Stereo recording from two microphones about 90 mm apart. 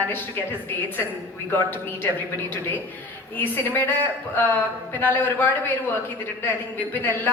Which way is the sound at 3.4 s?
20° left (ahead or behind).